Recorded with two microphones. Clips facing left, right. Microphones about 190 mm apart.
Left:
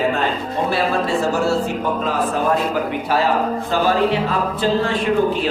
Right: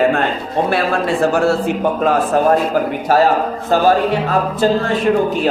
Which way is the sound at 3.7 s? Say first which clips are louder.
Right 5 dB; 45° right (ahead or behind).